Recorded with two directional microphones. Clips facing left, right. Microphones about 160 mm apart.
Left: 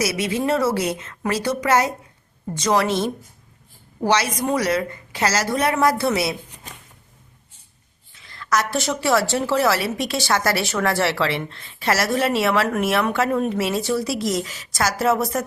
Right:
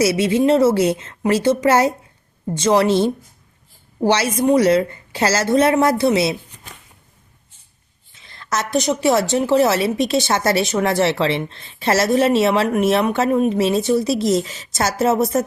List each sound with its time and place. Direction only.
0.0 s a woman's voice: 25° right (ahead or behind)
8.1 s a woman's voice: 25° right (ahead or behind)